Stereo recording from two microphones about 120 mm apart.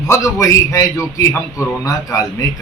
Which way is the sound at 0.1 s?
25° left (ahead or behind).